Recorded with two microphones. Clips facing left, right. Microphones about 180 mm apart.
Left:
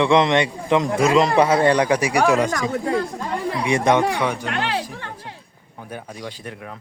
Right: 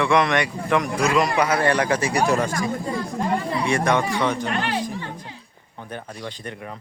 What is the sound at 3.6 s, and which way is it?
Speech, 20° left (ahead or behind).